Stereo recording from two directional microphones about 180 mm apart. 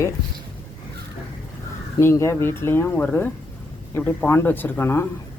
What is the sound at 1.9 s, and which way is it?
A woman's voice, 15° left (ahead or behind).